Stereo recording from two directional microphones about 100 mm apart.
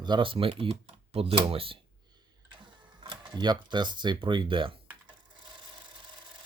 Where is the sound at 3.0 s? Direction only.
45° right (ahead or behind).